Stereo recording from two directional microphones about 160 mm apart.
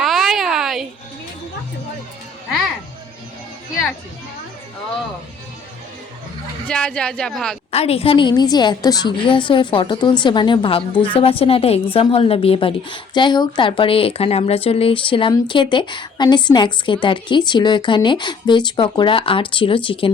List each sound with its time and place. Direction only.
0.0 s a sound: centre (ahead or behind)
6.7 s speech: 5° left (ahead or behind)
7.7 s a woman's voice: 40° left (ahead or behind)